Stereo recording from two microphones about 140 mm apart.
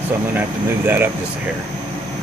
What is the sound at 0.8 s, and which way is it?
Speech, 15° right (ahead or behind).